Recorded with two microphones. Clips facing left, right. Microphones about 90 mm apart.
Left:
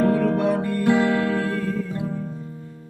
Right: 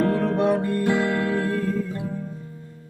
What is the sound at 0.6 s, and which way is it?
Music, 25° right (ahead or behind).